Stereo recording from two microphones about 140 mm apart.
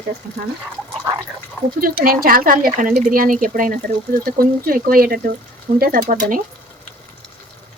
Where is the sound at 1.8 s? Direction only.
90° right; by 2.9 s 75° right (ahead or behind).